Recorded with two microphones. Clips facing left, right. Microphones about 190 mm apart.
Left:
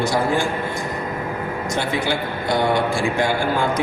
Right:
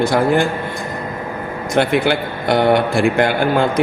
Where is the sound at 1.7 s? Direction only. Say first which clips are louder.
Right 8 dB; 65° right (ahead or behind).